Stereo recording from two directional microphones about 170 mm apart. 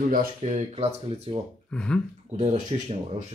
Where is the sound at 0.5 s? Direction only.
35° right (ahead or behind).